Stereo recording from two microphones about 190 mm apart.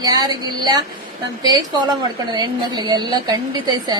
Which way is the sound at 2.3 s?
20° right (ahead or behind).